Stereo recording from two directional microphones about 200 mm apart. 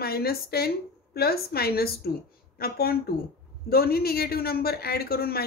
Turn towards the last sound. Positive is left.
turn(degrees=50)  # may be behind; listen again after turning